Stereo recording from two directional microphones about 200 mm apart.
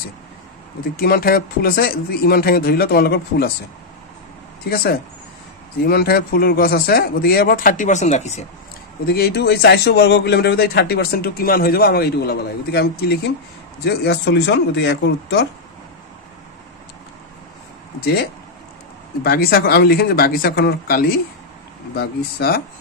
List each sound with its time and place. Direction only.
0.9 s a man's voice: 50° left (ahead or behind)
4.6 s a man's voice: 50° left (ahead or behind)
9.0 s a man's voice: 50° left (ahead or behind)
19.2 s a man's voice: 50° left (ahead or behind)